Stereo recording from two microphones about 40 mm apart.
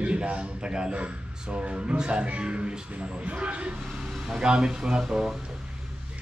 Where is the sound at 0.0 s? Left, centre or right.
Right.